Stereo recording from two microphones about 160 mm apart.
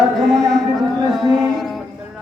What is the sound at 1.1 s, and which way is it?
Music, centre (ahead or behind).